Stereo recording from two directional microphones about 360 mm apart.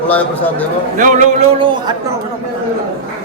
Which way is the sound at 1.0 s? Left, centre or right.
Right.